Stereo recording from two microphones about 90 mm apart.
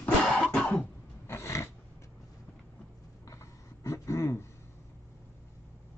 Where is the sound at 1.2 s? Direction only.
30° left (ahead or behind).